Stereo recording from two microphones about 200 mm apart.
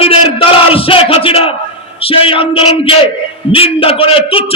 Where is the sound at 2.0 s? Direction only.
25° left (ahead or behind).